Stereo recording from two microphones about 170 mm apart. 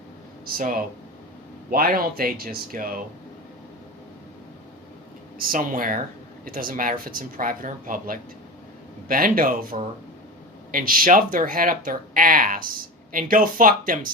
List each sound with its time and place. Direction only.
0.4 s speech: 55° right (ahead or behind)
5.4 s speech: 55° right (ahead or behind)